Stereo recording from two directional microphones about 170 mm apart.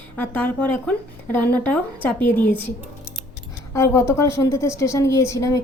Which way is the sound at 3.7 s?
15° left (ahead or behind).